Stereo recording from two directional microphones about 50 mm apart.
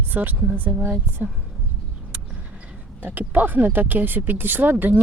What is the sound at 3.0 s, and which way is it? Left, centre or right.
Speech, right.